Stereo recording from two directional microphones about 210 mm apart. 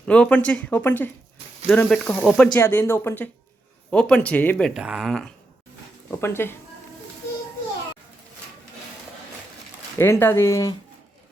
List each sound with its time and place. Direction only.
0.1 s speech: 5° left (ahead or behind)
10.0 s speech: 10° left (ahead or behind)